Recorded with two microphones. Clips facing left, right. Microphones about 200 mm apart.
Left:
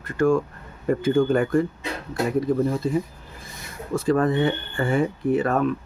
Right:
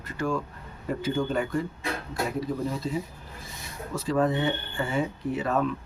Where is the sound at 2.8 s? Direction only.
55° left (ahead or behind).